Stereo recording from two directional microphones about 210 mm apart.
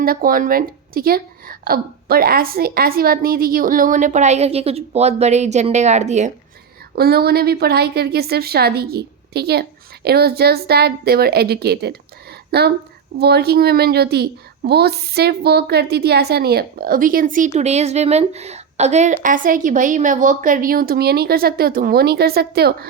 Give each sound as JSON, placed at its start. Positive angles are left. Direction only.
{"t": 0.0, "sound": "a woman's voice", "side_deg": -45}
{"t": 6.9, "sound": "a woman's voice", "side_deg": -45}